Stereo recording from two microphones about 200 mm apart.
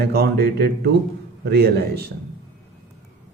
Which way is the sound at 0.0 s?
55° right (ahead or behind).